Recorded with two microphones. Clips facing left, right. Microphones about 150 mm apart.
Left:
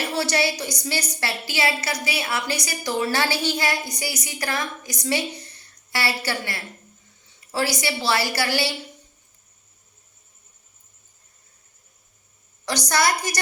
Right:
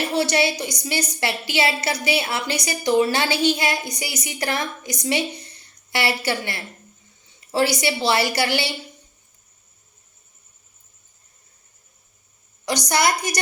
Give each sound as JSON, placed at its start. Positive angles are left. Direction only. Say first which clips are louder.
{"t": 0.1, "sound": "a woman's voice", "louder": "right 3 dB", "side_deg": -20}
{"t": 12.9, "sound": "a woman's voice", "louder": "right 1 dB", "side_deg": -20}